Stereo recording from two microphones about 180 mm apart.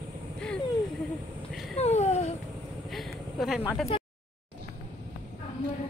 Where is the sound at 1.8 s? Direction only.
35° left (ahead or behind).